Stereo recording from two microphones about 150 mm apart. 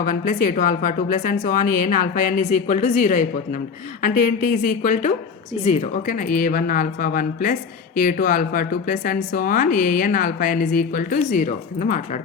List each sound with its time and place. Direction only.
0.0 s speech: 65° left (ahead or behind)
5.6 s speech: 45° left (ahead or behind)